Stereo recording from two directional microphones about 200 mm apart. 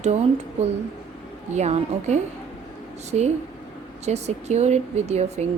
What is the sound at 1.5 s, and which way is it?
Speech, 35° right (ahead or behind).